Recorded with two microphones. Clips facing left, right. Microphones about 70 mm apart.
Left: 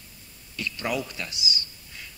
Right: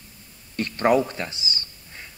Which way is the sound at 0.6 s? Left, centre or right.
Right.